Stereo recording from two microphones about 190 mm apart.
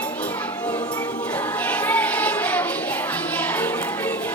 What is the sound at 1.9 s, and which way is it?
Child singing, 10° left (ahead or behind).